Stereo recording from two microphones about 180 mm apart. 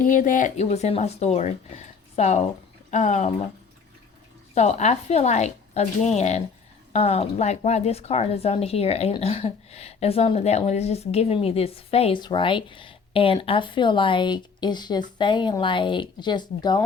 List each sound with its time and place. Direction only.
0.0 s speech: 50° left (ahead or behind)
4.5 s speech: 40° left (ahead or behind)